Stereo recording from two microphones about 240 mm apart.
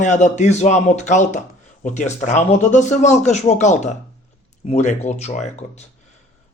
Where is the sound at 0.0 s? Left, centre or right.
Left.